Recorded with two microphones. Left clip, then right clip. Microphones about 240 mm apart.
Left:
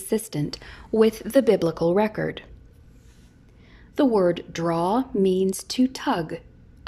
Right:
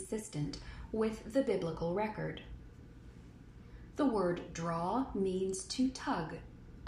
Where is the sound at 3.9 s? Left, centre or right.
Left.